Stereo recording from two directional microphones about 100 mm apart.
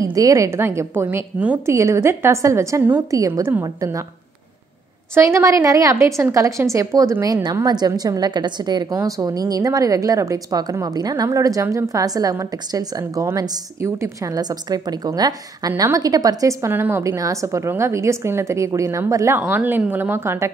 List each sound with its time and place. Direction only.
0.0 s a woman's voice: 35° right (ahead or behind); by 1.6 s 15° right (ahead or behind)
1.7 s a woman's voice: 30° right (ahead or behind)
5.1 s speech: 30° right (ahead or behind)
7.6 s a woman's voice: 40° right (ahead or behind)
19.5 s a woman's voice: 20° right (ahead or behind)